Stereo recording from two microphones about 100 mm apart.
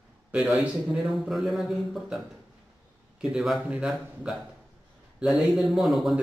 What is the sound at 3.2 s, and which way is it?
Speech, 5° right (ahead or behind).